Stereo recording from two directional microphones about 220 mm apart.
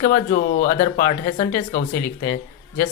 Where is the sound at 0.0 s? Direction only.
40° left (ahead or behind).